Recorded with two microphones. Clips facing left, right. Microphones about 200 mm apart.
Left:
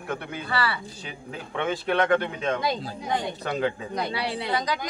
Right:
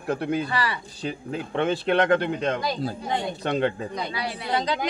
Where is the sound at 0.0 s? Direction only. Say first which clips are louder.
Right 7 dB; 35° right (ahead or behind).